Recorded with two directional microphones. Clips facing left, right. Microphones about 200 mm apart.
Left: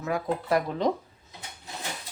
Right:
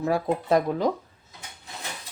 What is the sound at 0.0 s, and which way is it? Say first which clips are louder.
Speech: right 4 dB; 30° right (ahead or behind).